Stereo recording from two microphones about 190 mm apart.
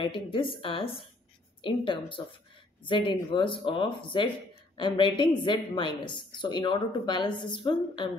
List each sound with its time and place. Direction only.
0.0 s speech: 25° left (ahead or behind)